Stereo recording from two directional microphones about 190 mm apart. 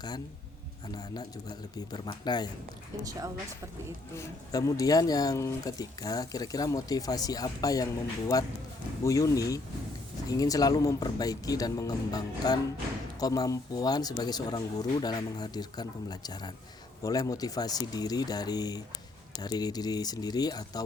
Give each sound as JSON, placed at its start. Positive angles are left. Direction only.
{"t": 0.9, "sound": "speech", "side_deg": 20}
{"t": 3.0, "sound": "speech", "side_deg": -20}
{"t": 4.1, "sound": "speech", "side_deg": 15}